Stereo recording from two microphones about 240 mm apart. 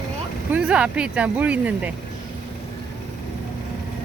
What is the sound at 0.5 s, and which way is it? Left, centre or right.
Speech, centre.